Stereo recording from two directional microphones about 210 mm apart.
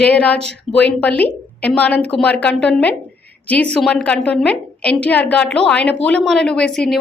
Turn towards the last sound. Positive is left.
turn(degrees=5)  # may be behind; listen again after turning